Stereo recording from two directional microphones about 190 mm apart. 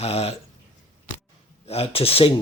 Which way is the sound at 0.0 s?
30° left (ahead or behind).